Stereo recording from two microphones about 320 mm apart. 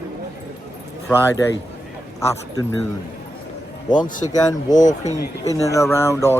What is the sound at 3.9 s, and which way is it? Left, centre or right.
Speech, centre.